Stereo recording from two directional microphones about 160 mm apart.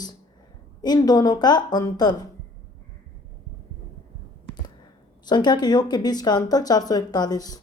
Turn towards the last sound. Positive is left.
turn(degrees=25)  # may be behind; listen again after turning